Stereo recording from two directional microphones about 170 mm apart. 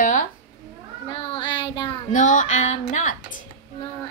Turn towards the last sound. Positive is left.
turn(degrees=45)  # may be behind; listen again after turning